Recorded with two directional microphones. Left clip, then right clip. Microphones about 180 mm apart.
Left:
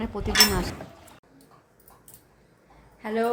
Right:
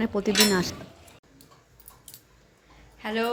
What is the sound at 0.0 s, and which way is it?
Speech, 20° right (ahead or behind).